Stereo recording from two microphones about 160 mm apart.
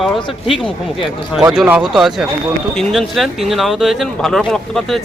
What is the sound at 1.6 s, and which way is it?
Speech, 5° right (ahead or behind).